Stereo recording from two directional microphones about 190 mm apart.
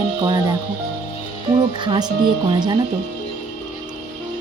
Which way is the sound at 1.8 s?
25° right (ahead or behind).